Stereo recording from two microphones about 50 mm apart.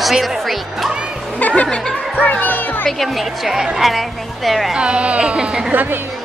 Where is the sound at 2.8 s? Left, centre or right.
Centre.